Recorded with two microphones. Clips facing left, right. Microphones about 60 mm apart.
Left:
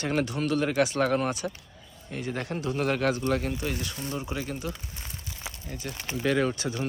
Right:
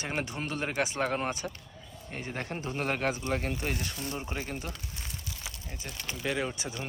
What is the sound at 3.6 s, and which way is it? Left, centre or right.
Speech, right.